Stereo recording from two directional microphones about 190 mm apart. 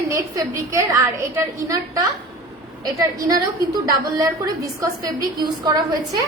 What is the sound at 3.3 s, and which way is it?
A woman's voice, 20° right (ahead or behind).